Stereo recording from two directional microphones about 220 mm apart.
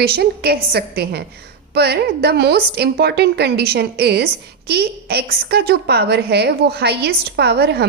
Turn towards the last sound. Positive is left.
turn(degrees=-50)  # may be behind; listen again after turning